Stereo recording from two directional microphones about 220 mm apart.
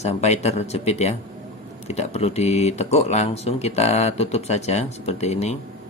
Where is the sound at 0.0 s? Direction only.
30° left (ahead or behind).